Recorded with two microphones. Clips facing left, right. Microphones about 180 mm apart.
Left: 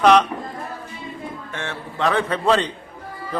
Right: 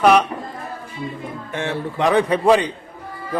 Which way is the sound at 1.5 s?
15° right (ahead or behind).